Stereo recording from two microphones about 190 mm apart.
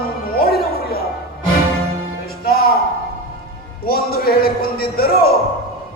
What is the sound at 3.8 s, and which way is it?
A man's voice, 50° left (ahead or behind).